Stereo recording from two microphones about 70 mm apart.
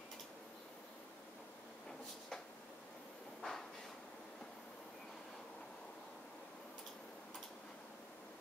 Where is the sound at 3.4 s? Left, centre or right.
Centre.